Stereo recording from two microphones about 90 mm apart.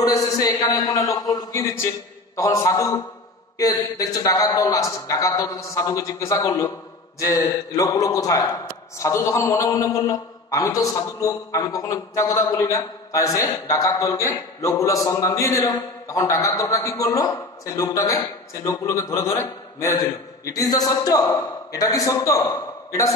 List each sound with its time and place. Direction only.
0.0 s a man's voice: 40° left (ahead or behind)
20.4 s a man's voice: 40° left (ahead or behind)